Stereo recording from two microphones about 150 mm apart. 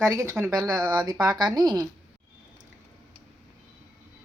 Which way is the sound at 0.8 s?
30° right (ahead or behind).